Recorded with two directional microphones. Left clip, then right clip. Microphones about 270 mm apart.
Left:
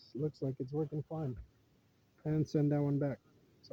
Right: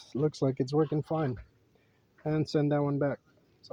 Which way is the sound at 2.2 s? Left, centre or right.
Centre.